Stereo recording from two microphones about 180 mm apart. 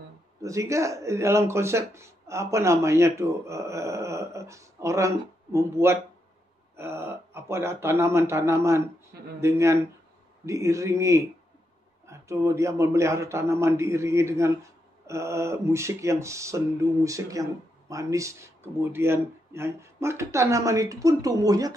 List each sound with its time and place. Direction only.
0.4 s speech: 15° right (ahead or behind)